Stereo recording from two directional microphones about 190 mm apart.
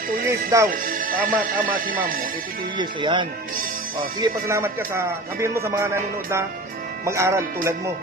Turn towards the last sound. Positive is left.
turn(degrees=-15)  # may be behind; listen again after turning